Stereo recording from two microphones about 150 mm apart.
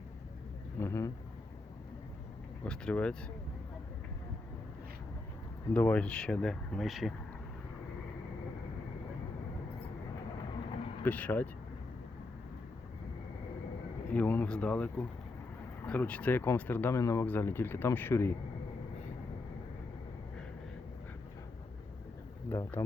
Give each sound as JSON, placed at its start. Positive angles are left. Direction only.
{"t": 0.8, "sound": "speech", "side_deg": 20}
{"t": 2.6, "sound": "speech", "side_deg": 5}
{"t": 5.7, "sound": "speech", "side_deg": 10}
{"t": 11.0, "sound": "speech", "side_deg": 10}
{"t": 14.1, "sound": "speech", "side_deg": 10}
{"t": 22.4, "sound": "speech", "side_deg": 15}